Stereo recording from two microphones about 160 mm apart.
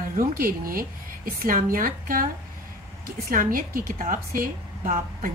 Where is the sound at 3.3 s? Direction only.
60° right (ahead or behind).